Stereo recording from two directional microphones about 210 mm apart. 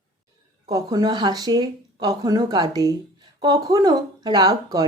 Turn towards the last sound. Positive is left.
turn(degrees=-20)  # may be behind; listen again after turning